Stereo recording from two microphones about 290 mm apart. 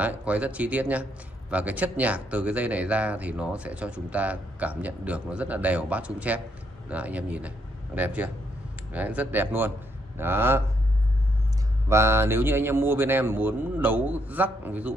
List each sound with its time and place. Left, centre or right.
0.0 s a man's voice: centre
11.9 s a man's voice: centre